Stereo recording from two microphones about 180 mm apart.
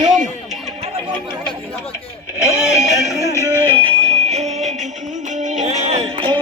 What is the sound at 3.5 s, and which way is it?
Music, 30° right (ahead or behind).